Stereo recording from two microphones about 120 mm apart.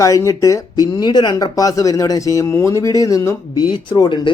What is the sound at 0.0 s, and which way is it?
Speech, 25° left (ahead or behind).